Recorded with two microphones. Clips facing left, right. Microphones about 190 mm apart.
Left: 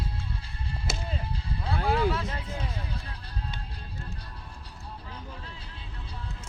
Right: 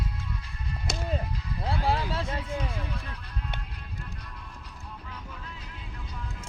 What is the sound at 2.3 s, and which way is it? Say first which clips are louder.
Music: right 3 dB; 30° left (ahead or behind).